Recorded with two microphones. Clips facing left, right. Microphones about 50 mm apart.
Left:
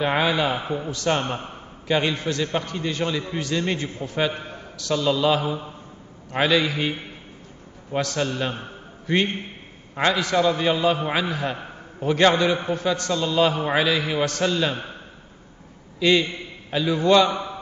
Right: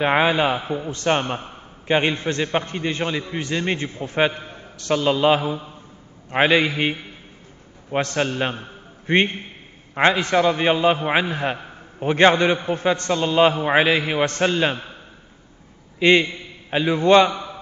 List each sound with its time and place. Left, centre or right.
0.0 s a man's voice: right
16.0 s a man's voice: right